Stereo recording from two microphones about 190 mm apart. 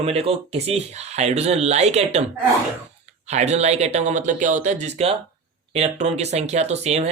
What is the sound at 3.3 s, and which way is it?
Speech, 35° right (ahead or behind).